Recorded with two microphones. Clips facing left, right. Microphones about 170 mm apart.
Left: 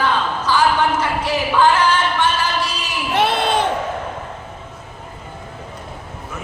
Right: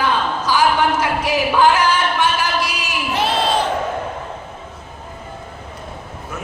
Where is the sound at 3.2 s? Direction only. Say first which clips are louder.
Left 1 dB; 55° left (ahead or behind).